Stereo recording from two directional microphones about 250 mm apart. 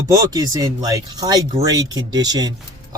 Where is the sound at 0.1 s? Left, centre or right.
Centre.